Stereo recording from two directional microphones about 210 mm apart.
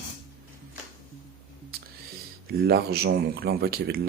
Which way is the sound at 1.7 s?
45° right (ahead or behind).